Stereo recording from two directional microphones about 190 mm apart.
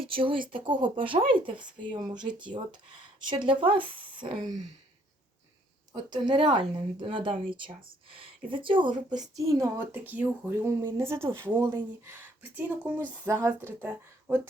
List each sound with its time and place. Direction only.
0.0 s speech: 30° right (ahead or behind)
5.9 s speech: 25° right (ahead or behind)